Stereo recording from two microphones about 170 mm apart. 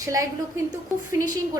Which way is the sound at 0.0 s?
20° right (ahead or behind).